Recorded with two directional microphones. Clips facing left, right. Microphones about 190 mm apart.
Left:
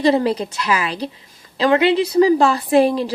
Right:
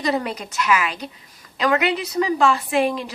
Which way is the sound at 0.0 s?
30° left (ahead or behind).